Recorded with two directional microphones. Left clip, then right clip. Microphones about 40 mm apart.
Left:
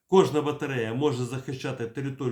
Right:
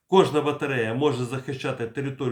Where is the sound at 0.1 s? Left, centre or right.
Centre.